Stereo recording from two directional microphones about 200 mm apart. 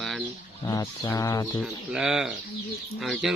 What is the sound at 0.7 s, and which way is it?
Speech, 15° left (ahead or behind).